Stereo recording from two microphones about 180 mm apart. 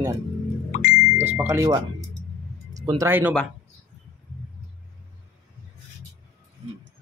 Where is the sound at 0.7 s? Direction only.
40° left (ahead or behind).